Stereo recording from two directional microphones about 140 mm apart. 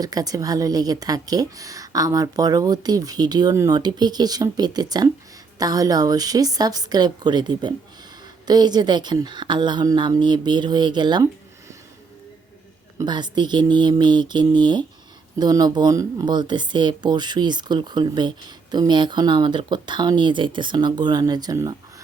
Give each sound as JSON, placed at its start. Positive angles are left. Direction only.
{"t": 0.0, "sound": "speech", "side_deg": -25}
{"t": 13.0, "sound": "speech", "side_deg": -30}